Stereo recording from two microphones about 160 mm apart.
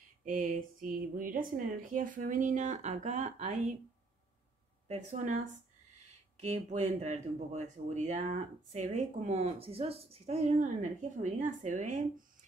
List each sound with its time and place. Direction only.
0.2 s speech: 60° right (ahead or behind)
4.8 s speech: 45° right (ahead or behind)